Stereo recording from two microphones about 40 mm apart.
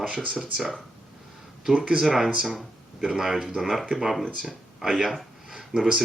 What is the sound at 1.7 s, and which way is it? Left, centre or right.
Speech, centre.